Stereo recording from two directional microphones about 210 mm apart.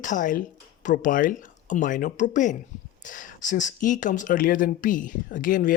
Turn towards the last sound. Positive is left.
turn(degrees=40)  # may be behind; listen again after turning